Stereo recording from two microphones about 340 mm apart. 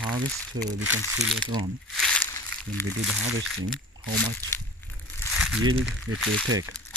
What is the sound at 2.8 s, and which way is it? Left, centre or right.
Speech, centre.